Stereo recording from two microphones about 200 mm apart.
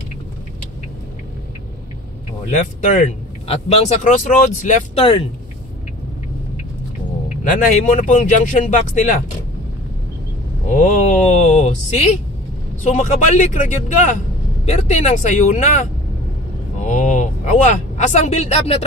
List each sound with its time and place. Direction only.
2.5 s speech: 35° left (ahead or behind)
7.5 s speech: 40° left (ahead or behind)
10.7 s speech: 40° left (ahead or behind)